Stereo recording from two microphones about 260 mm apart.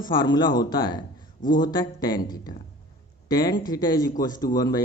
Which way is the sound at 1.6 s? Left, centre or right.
Centre.